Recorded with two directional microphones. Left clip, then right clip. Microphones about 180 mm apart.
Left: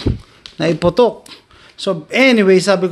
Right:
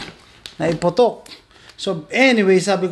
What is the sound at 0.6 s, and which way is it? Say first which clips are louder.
Speech: left 3 dB; 30° left (ahead or behind).